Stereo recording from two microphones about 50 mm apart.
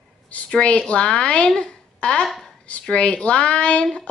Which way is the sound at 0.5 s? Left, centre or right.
Left.